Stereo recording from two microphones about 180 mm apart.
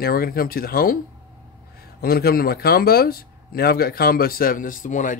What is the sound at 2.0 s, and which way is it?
Speech, 55° left (ahead or behind).